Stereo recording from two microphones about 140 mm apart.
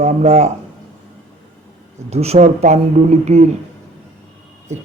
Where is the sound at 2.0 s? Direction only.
50° right (ahead or behind).